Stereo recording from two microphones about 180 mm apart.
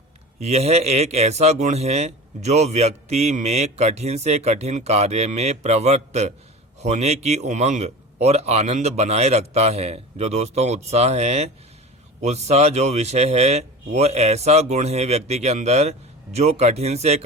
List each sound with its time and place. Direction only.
0.3 s a man's voice: 35° right (ahead or behind)